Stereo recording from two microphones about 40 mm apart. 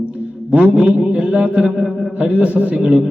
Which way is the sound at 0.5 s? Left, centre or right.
Right.